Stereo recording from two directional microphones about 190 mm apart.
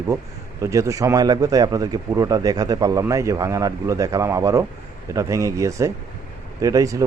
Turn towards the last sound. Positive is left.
turn(degrees=-20)  # may be behind; listen again after turning